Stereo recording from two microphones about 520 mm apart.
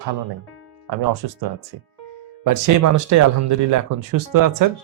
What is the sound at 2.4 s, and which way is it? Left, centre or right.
Speech, right.